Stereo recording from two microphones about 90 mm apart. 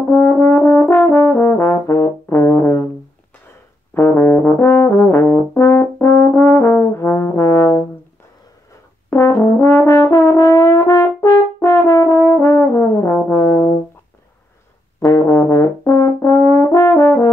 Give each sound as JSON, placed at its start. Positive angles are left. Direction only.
{"t": 0.1, "sound": "brass instrument", "side_deg": 25}
{"t": 3.9, "sound": "brass instrument", "side_deg": 25}
{"t": 9.1, "sound": "brass instrument", "side_deg": 30}
{"t": 15.0, "sound": "brass instrument", "side_deg": 35}